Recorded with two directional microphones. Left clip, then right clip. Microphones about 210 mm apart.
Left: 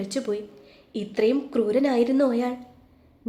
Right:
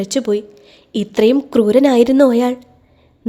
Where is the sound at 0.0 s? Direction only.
40° right (ahead or behind).